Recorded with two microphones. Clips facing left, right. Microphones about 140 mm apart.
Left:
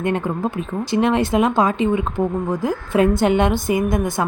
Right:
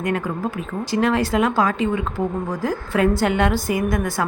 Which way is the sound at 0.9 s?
20° left (ahead or behind).